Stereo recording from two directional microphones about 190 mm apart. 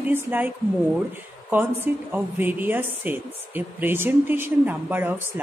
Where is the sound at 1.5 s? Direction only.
10° right (ahead or behind).